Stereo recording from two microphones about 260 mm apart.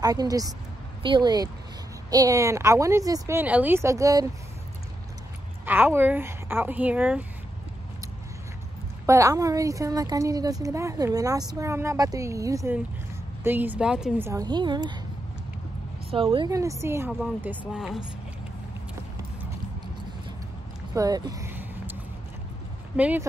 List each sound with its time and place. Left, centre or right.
0.0 s speech: centre
5.7 s speech: centre
9.0 s speech: centre
16.1 s speech: centre
20.9 s a sound: centre
22.9 s speech: centre